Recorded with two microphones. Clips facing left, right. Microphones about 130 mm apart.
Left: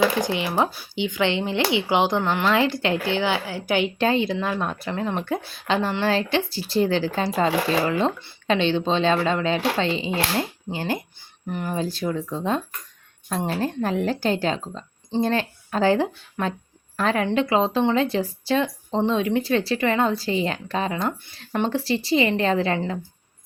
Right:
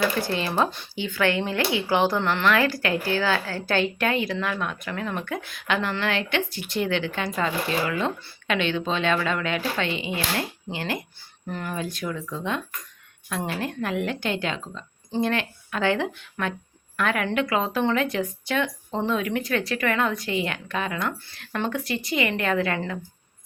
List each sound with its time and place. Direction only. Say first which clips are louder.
0.2 s speech: left 2 dB; 15° left (ahead or behind)
3.9 s a woman's voice: left 4 dB; 30° left (ahead or behind)